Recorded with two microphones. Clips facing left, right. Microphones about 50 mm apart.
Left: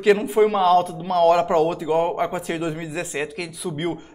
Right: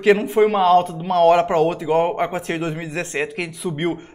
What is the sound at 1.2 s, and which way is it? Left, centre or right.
A man's voice, centre.